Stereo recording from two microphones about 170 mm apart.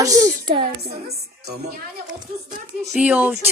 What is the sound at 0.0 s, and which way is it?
Speech, 20° right (ahead or behind).